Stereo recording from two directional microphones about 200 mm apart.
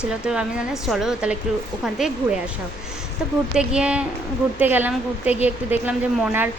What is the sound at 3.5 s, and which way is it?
A woman's voice, 5° right (ahead or behind).